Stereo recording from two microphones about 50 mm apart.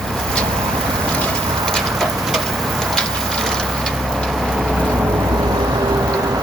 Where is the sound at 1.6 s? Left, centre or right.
Centre.